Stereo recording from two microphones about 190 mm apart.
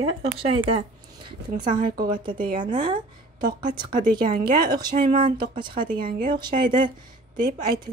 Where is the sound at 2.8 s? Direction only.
25° right (ahead or behind).